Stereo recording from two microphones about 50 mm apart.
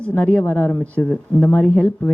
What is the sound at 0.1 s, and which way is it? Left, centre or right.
Speech, left.